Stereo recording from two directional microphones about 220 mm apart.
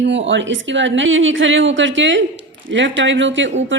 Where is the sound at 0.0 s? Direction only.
55° right (ahead or behind).